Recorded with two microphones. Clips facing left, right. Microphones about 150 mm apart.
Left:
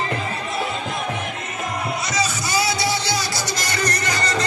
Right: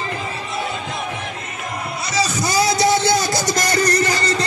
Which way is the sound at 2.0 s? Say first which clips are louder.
Right 3 dB; 40° right (ahead or behind).